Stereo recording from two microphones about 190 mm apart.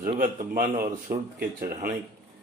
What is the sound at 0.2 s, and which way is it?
A man's voice, 45° right (ahead or behind).